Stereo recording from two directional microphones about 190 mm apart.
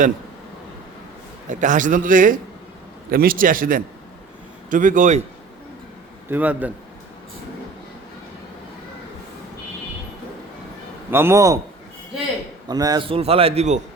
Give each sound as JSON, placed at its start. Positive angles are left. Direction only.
{"t": 1.5, "sound": "a man's voice", "side_deg": -40}
{"t": 6.2, "sound": "a man's voice", "side_deg": -10}
{"t": 11.1, "sound": "a man's voice", "side_deg": -15}
{"t": 12.6, "sound": "a man's voice", "side_deg": -20}